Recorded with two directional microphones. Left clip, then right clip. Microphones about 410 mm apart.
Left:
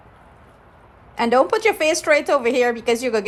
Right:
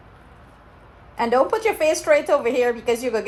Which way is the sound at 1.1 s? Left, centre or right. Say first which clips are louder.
Left 2 dB; centre.